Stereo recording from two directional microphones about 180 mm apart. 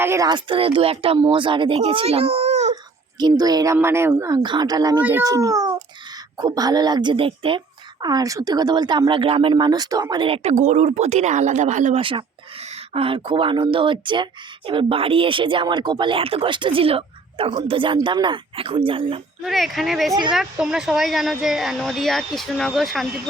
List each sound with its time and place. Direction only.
0.0 s speech: 15° right (ahead or behind); by 2.6 s 35° right (ahead or behind)
3.2 s speech: 25° right (ahead or behind); by 11.9 s 45° right (ahead or behind)
11.9 s speech: 30° right (ahead or behind)
19.4 s speech: centre (ahead or behind)